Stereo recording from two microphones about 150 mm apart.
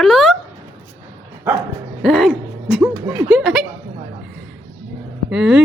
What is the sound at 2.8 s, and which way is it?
Speech, 20° right (ahead or behind).